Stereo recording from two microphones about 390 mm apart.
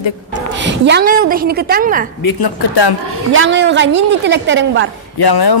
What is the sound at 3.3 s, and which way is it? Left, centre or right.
A woman's voice, right.